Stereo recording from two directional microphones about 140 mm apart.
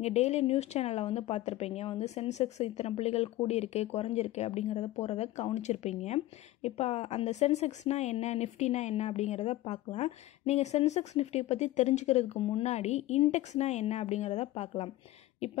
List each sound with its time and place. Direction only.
0.0 s speech: 50° left (ahead or behind)